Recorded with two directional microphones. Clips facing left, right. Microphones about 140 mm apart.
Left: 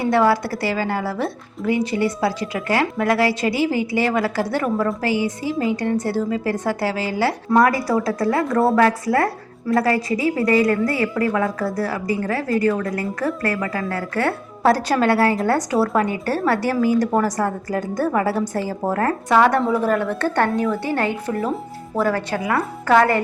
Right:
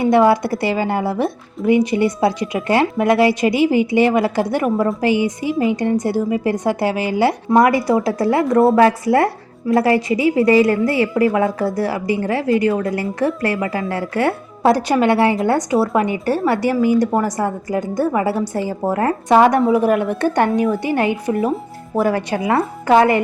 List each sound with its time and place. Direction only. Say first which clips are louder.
0.0 s a woman's voice: right 4 dB; 20° right (ahead or behind)